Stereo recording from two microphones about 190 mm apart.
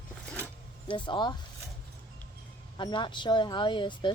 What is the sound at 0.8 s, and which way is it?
Speech, 25° left (ahead or behind).